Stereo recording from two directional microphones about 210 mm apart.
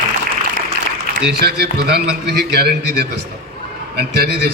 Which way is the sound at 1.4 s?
50° right (ahead or behind).